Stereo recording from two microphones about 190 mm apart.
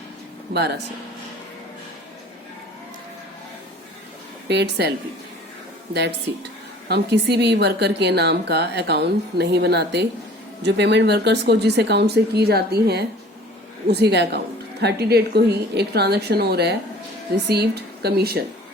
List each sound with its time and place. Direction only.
0.5 s speech: 60° right (ahead or behind)
4.4 s speech: 60° right (ahead or behind)